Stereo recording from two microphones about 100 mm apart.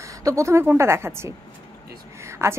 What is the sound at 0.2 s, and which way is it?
A woman's voice, 30° right (ahead or behind).